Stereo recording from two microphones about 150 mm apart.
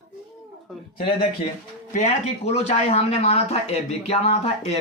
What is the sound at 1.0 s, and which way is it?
Speech, 40° left (ahead or behind).